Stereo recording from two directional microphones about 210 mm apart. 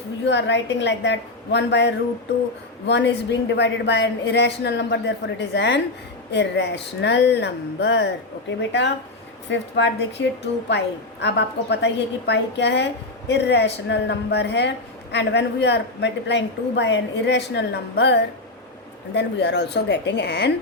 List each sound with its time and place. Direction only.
0.3 s a woman's voice: 55° left (ahead or behind)